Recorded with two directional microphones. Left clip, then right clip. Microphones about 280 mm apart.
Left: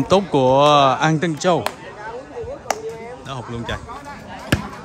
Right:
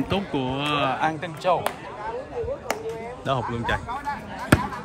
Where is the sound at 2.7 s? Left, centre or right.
Centre.